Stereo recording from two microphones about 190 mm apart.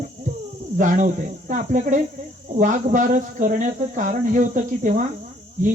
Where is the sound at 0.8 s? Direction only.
40° right (ahead or behind).